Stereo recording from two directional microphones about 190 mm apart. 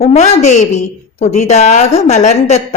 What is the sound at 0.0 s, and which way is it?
A woman's voice, 35° left (ahead or behind).